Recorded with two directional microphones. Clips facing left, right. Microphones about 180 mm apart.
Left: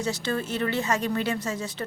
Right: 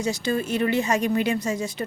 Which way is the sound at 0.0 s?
10° right (ahead or behind).